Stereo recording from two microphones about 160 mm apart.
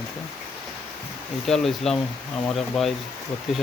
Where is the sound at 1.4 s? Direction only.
Centre (ahead or behind).